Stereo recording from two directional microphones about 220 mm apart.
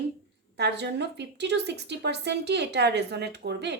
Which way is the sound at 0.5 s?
50° right (ahead or behind).